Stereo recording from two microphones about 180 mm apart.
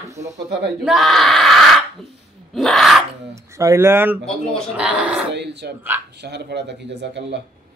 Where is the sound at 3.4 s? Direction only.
15° right (ahead or behind).